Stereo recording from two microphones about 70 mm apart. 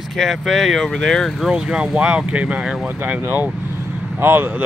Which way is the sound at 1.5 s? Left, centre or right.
Centre.